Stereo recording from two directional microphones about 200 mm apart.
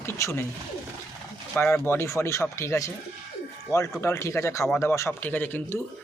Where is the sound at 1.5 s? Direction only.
10° left (ahead or behind).